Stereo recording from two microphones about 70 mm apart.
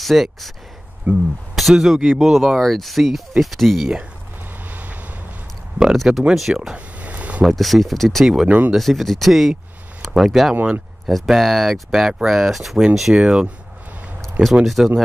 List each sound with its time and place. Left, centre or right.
0.0 s speech: centre
1.1 s speech: right
1.5 s speech: centre
4.6 s vehicle: right
5.8 s speech: centre
7.0 s a sound: right
7.4 s speech: centre
8.3 s speech: centre
8.7 s speech: centre
10.5 s speech: right
11.1 s speech: centre
14.4 s speech: centre